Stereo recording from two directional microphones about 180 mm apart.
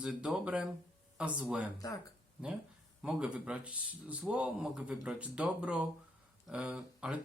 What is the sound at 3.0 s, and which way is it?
Speech, 5° right (ahead or behind).